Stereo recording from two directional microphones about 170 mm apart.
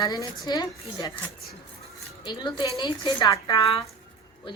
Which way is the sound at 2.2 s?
25° left (ahead or behind).